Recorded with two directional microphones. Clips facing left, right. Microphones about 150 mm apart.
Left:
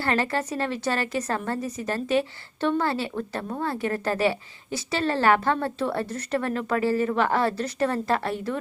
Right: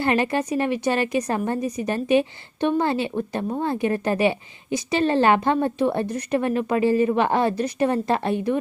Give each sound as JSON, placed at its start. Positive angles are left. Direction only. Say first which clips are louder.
{"t": 0.0, "sound": "a woman's voice", "louder": "right 4 dB", "side_deg": -15}